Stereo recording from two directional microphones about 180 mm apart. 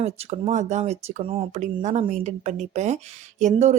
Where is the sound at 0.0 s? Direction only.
35° right (ahead or behind).